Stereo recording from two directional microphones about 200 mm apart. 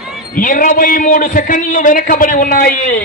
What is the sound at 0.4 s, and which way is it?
A man's voice, 45° left (ahead or behind).